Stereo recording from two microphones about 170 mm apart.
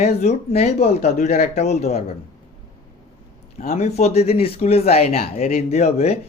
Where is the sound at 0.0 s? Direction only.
40° left (ahead or behind).